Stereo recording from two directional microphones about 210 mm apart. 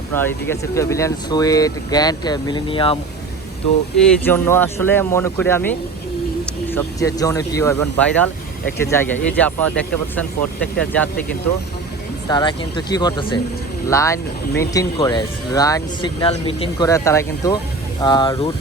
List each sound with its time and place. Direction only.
0.1 s speech: 10° left (ahead or behind)
3.9 s speech: 5° left (ahead or behind)
12.3 s speech: 20° left (ahead or behind)